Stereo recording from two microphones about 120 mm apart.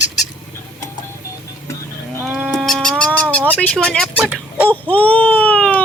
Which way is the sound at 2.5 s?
Centre (ahead or behind).